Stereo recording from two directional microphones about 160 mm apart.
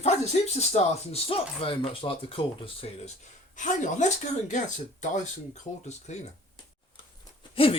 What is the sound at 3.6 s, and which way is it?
Speech, 50° left (ahead or behind).